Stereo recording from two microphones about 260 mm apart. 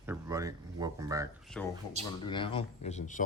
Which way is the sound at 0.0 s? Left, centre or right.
Centre.